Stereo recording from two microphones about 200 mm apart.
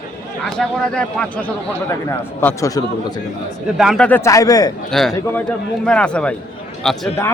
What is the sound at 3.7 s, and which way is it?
Speech, centre (ahead or behind).